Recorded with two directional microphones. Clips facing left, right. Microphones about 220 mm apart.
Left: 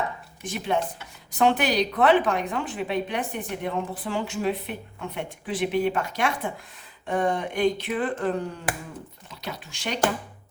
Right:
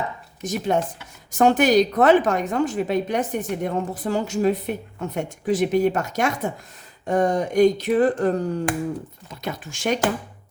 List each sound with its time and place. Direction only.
0.4 s a woman's voice: 45° right (ahead or behind)